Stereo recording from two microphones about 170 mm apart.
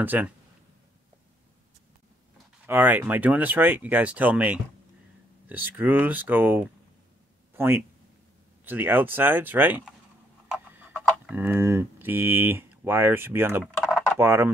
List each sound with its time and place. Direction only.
0.0 s speech: 10° right (ahead or behind)
2.6 s speech: 10° right (ahead or behind)